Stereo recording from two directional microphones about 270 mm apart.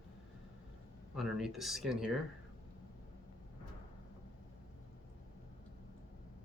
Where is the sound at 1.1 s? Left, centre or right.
Centre.